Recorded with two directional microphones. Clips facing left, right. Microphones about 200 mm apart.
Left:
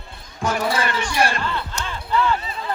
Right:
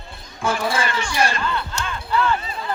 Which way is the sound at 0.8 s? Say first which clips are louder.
Left 1 dB; 55° left (ahead or behind).